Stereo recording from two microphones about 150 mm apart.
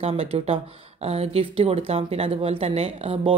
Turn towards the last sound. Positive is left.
turn(degrees=-40)  # may be behind; listen again after turning